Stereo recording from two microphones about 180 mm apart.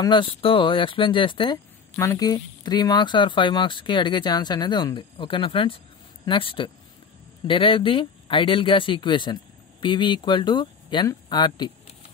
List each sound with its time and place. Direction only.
0.0 s speech: 25° left (ahead or behind)